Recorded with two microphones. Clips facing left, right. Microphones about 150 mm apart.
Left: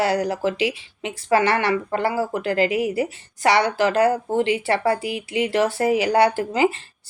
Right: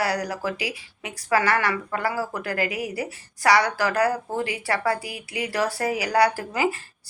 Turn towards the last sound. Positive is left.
turn(degrees=25)  # may be behind; listen again after turning